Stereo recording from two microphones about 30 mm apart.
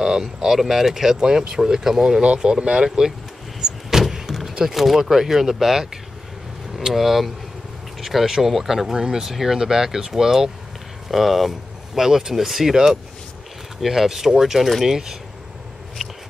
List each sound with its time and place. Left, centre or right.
0.0 s speech: centre
1.2 s speech: right
3.6 s vehicle: right
4.0 s vehicle: centre
4.7 s speech: centre
8.9 s speech: right
11.1 s speech: centre
12.0 s speech: centre
12.4 s speech: centre
13.7 s speech: centre
16.0 s a sound: centre